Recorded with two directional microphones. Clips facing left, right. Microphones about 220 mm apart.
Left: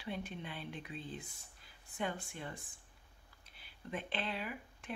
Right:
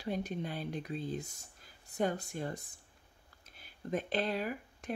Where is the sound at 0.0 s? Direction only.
40° right (ahead or behind).